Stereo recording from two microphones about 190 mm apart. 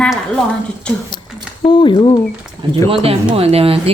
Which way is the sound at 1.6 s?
25° left (ahead or behind).